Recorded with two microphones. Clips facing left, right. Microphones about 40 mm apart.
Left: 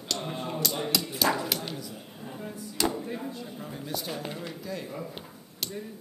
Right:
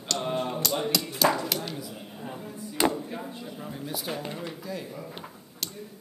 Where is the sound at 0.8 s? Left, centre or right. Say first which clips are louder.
Right 3 dB; centre.